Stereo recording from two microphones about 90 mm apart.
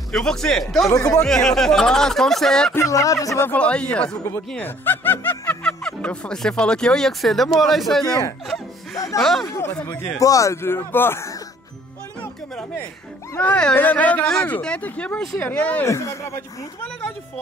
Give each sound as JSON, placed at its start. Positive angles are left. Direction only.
{"t": 0.1, "sound": "speech", "side_deg": 5}
{"t": 0.8, "sound": "speech", "side_deg": 40}
{"t": 1.2, "sound": "speech", "side_deg": 5}
{"t": 2.8, "sound": "speech", "side_deg": 40}
{"t": 3.4, "sound": "speech", "side_deg": 15}
{"t": 4.6, "sound": "speech", "side_deg": 20}
{"t": 5.6, "sound": "speech", "side_deg": 10}
{"t": 8.0, "sound": "speech", "side_deg": 45}
{"t": 9.2, "sound": "speech", "side_deg": 0}
{"t": 9.5, "sound": "speech", "side_deg": 30}
{"t": 12.2, "sound": "music", "side_deg": 15}
{"t": 13.7, "sound": "speech", "side_deg": 15}
{"t": 15.9, "sound": "speech", "side_deg": 35}